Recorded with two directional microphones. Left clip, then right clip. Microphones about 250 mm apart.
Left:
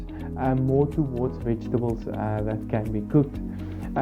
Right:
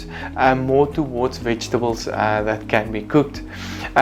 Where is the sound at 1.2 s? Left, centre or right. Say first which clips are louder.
Right 7 dB; centre.